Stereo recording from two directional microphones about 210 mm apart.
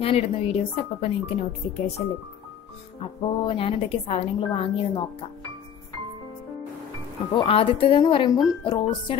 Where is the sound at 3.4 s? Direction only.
25° left (ahead or behind).